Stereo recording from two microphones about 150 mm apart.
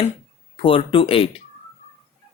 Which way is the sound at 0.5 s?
35° left (ahead or behind).